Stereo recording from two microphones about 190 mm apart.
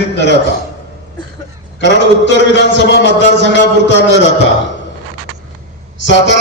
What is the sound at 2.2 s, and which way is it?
A man's voice, 70° left (ahead or behind).